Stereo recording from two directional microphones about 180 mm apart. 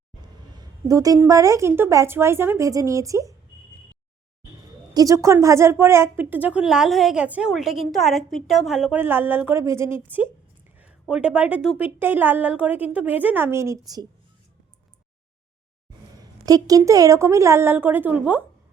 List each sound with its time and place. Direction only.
0.2 s a woman's voice: 25° right (ahead or behind)
4.9 s a woman's voice: 15° right (ahead or behind)
16.1 s a woman's voice: 20° right (ahead or behind)